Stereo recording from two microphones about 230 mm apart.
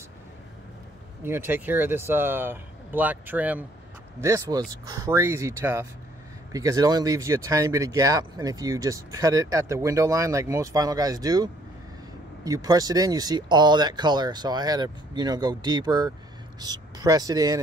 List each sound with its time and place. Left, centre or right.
1.2 s speech: centre